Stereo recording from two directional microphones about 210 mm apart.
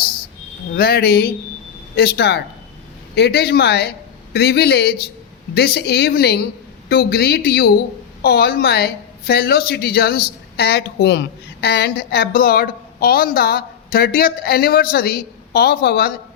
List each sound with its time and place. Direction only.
0.8 s a woman's voice: 45° left (ahead or behind)